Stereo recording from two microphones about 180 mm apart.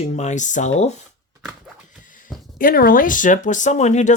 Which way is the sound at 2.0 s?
50° left (ahead or behind).